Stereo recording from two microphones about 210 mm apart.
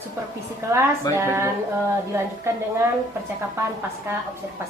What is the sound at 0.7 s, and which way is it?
Speech, 10° right (ahead or behind).